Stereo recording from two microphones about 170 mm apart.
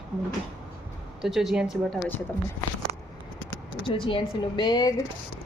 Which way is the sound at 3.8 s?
30° left (ahead or behind).